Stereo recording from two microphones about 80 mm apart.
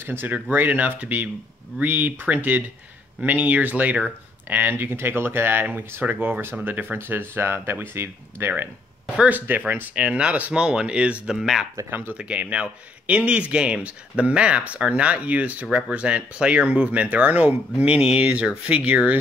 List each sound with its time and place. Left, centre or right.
0.0 s speech: right
9.1 s speech: centre
11.9 s speech: right